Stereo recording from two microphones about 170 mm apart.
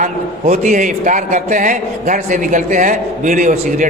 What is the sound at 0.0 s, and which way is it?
A man's voice, 45° right (ahead or behind).